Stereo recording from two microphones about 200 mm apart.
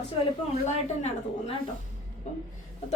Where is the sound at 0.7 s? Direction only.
35° left (ahead or behind).